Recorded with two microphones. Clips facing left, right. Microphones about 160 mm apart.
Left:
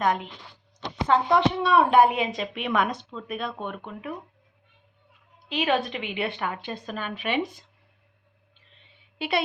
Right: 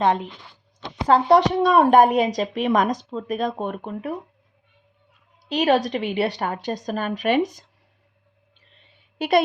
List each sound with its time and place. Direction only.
0.0 s speech: 30° right (ahead or behind)
5.5 s speech: 40° right (ahead or behind)
9.1 s a woman's voice: 45° right (ahead or behind)